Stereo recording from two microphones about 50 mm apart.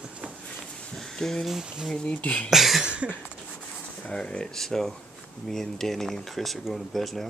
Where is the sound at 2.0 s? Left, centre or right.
Left.